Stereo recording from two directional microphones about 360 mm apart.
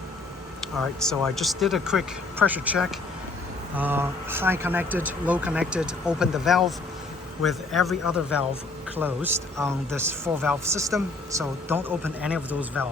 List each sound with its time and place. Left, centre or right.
1.0 s speech: centre